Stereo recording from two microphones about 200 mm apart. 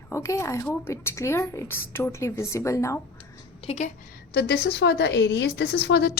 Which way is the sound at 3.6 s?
35° left (ahead or behind).